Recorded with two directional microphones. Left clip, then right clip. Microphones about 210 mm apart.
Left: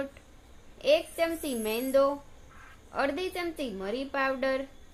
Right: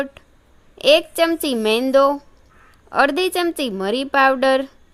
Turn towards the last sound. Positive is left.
turn(degrees=-50)  # may be behind; listen again after turning